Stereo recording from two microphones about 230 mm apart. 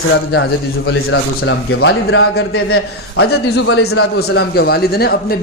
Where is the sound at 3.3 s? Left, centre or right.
Left.